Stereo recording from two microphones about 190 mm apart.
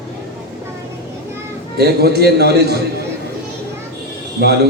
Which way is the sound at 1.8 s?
55° right (ahead or behind).